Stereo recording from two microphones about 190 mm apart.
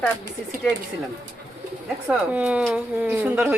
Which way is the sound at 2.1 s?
5° right (ahead or behind).